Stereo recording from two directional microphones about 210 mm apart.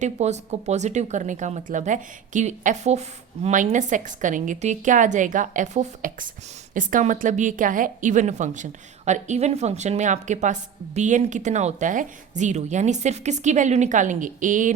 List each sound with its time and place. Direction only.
0.0 s a woman's voice: 35° right (ahead or behind)